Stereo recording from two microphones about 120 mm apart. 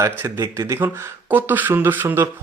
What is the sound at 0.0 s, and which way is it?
Speech, 30° right (ahead or behind).